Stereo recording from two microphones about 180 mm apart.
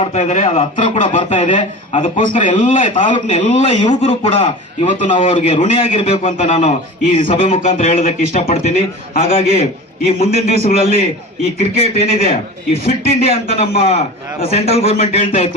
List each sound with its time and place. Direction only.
0.1 s a man's voice: 40° left (ahead or behind)